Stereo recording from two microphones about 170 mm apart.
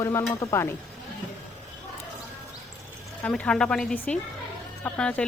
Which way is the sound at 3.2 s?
5° left (ahead or behind).